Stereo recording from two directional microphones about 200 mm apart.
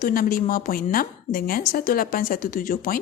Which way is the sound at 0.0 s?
45° left (ahead or behind).